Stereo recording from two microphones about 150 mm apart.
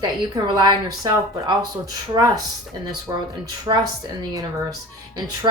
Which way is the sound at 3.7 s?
20° right (ahead or behind).